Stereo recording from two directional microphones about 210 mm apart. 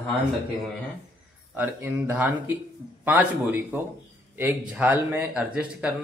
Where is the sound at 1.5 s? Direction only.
10° right (ahead or behind).